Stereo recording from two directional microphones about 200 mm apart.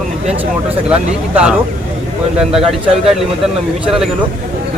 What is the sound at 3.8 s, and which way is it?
Speech, centre (ahead or behind).